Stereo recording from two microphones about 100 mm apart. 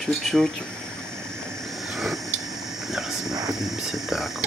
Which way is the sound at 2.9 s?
5° right (ahead or behind).